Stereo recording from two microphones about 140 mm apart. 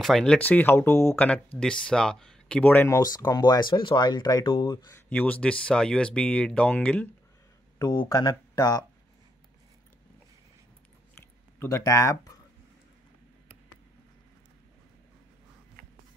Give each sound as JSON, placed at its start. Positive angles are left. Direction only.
{"t": 0.0, "sound": "speech", "side_deg": 5}
{"t": 3.0, "sound": "speech", "side_deg": 25}
{"t": 4.8, "sound": "speech", "side_deg": 15}
{"t": 7.8, "sound": "speech", "side_deg": 30}
{"t": 11.6, "sound": "speech", "side_deg": 20}